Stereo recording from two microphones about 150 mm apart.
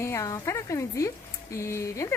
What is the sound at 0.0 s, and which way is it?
Speech, 20° left (ahead or behind).